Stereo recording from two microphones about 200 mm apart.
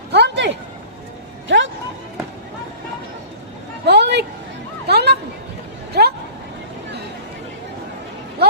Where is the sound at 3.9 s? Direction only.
55° right (ahead or behind).